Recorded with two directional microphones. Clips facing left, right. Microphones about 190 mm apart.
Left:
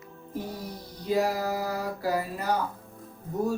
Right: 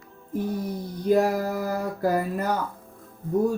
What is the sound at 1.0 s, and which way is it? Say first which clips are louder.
Speech: right 5 dB; 55° right (ahead or behind).